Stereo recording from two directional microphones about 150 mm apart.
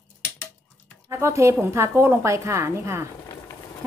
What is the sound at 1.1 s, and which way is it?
A woman's voice, 20° right (ahead or behind).